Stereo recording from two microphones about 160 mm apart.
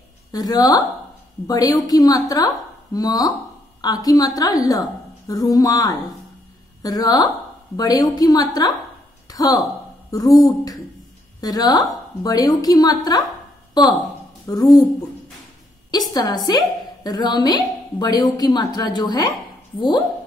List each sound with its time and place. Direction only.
0.3 s a woman's voice: 25° left (ahead or behind)
16.1 s a woman's voice: 25° left (ahead or behind)